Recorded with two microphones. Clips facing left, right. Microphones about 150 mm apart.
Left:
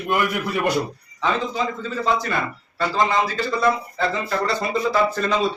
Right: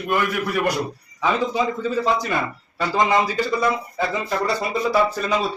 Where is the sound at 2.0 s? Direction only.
15° right (ahead or behind).